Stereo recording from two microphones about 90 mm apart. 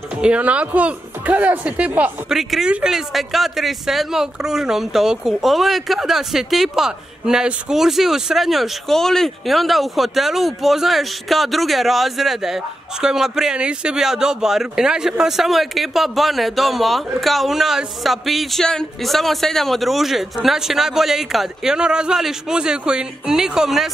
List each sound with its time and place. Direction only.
0.1 s speech: 10° right (ahead or behind)
2.2 s speech: 5° right (ahead or behind)